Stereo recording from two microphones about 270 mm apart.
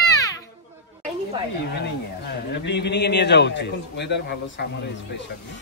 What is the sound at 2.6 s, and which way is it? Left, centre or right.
A man's voice, left.